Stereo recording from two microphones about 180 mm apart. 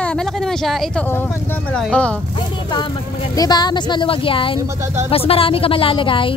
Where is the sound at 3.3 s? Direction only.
25° left (ahead or behind).